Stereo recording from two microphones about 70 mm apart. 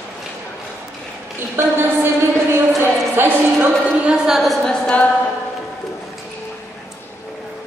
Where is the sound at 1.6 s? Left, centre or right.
Right.